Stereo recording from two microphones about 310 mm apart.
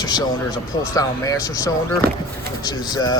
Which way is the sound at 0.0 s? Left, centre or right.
Centre.